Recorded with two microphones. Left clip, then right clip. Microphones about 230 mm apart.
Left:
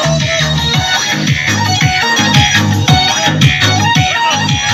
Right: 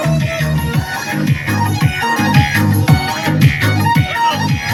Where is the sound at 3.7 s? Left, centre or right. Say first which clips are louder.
Left 4 dB; centre.